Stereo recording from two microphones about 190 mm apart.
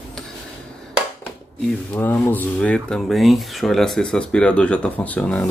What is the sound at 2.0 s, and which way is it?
Speech, 10° left (ahead or behind).